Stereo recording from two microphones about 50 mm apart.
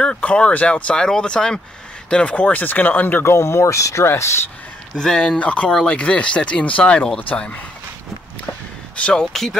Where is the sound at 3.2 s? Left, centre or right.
Left.